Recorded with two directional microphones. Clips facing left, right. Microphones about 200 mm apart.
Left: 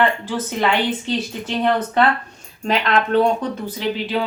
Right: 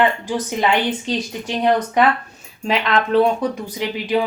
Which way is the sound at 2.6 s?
Centre (ahead or behind).